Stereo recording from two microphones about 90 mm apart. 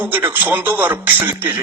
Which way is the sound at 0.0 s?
20° right (ahead or behind).